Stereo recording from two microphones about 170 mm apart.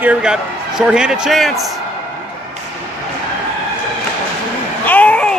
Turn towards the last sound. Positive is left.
turn(degrees=5)  # may be behind; listen again after turning